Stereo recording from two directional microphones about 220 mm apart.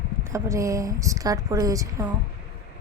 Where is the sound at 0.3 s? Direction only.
15° right (ahead or behind).